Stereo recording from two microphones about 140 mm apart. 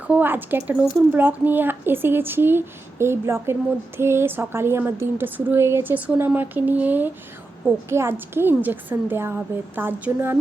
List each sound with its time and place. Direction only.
0.1 s speech: 15° right (ahead or behind)